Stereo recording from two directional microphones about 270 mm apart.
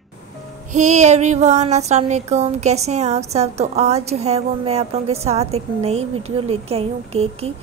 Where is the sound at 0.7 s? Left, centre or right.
Right.